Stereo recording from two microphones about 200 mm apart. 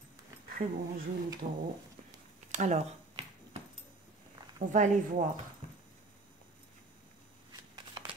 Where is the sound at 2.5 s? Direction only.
35° right (ahead or behind).